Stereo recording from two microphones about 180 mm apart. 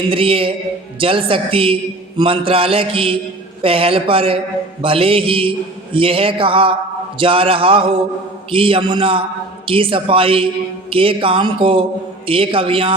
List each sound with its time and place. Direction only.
0.1 s a man's voice: 30° right (ahead or behind)